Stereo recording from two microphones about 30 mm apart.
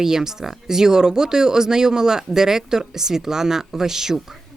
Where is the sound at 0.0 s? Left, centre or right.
Centre.